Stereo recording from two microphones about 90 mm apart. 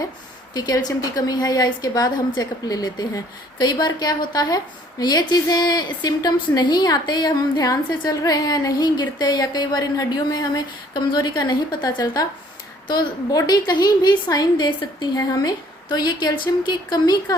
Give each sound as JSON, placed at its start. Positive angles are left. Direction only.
{"t": 0.5, "sound": "a woman's voice", "side_deg": 45}